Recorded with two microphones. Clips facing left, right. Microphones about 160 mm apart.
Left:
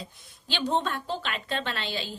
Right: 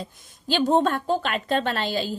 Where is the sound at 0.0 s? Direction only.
45° right (ahead or behind).